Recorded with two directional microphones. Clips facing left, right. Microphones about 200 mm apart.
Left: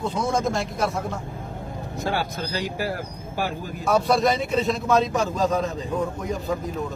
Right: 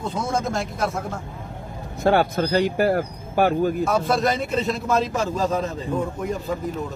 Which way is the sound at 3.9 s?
Centre (ahead or behind).